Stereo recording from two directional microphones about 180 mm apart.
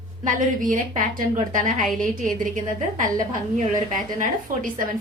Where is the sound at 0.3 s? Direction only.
45° right (ahead or behind).